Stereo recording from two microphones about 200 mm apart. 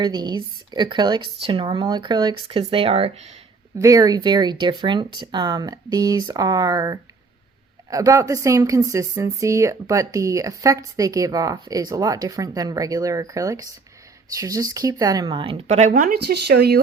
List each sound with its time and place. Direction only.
0.0 s speech: 20° right (ahead or behind)
3.8 s a woman's voice: 15° right (ahead or behind); by 15.9 s 35° right (ahead or behind)
15.9 s speech: 45° right (ahead or behind)